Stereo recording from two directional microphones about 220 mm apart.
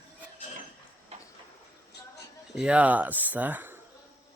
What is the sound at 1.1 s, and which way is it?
Train, 30° right (ahead or behind).